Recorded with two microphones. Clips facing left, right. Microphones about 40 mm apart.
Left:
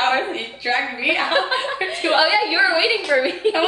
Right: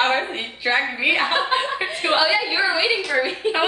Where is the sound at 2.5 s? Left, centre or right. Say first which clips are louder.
Left 3 dB; centre.